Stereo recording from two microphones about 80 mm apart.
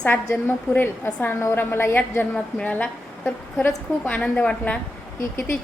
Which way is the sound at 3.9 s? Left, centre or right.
Left.